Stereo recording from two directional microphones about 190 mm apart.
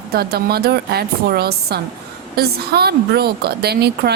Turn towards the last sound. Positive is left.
turn(degrees=-60)  # may be behind; listen again after turning